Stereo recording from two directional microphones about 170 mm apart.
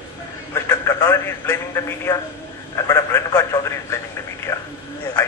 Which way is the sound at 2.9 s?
15° left (ahead or behind).